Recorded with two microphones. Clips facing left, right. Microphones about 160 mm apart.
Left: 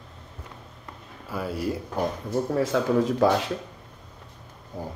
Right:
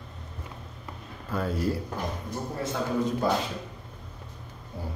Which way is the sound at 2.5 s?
90° left.